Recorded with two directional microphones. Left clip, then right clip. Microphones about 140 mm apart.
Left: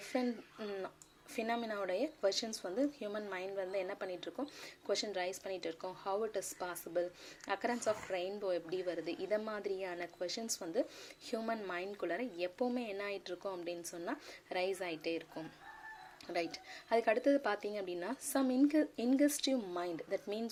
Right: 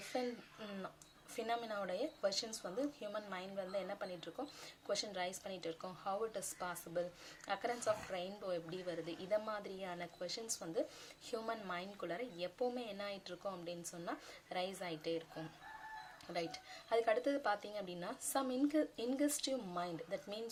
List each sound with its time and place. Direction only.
0.1 s a woman's voice: 35° left (ahead or behind)